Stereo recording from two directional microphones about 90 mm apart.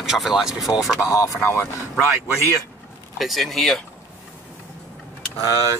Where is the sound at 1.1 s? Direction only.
40° left (ahead or behind).